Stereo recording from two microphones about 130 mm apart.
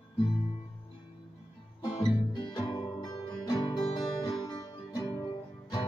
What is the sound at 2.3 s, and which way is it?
Music, 35° left (ahead or behind).